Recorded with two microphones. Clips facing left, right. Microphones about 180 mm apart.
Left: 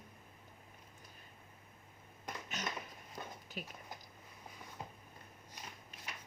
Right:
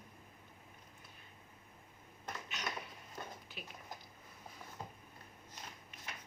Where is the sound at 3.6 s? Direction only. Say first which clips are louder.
Left 8 dB; 45° left (ahead or behind).